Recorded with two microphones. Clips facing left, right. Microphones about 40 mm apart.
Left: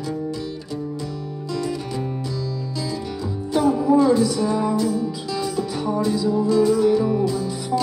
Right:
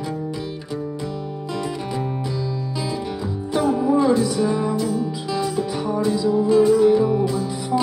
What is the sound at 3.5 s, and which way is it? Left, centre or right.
Music, centre.